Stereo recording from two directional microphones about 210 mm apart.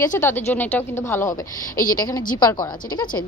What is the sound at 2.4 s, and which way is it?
Speech, 20° left (ahead or behind).